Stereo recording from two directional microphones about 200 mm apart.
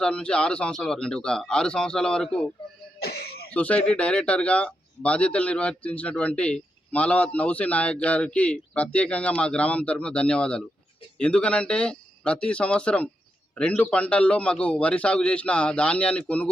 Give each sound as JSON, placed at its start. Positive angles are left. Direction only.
{"t": 0.0, "sound": "a man's voice", "side_deg": 5}
{"t": 3.0, "sound": "cough", "side_deg": 50}
{"t": 3.5, "sound": "a man's voice", "side_deg": 5}